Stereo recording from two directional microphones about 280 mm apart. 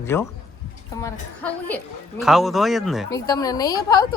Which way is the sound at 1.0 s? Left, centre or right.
Centre.